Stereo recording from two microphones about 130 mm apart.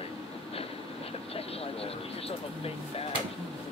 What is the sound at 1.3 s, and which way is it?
Speech, 50° left (ahead or behind).